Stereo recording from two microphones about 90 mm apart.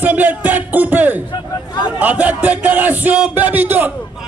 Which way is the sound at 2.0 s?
20° right (ahead or behind).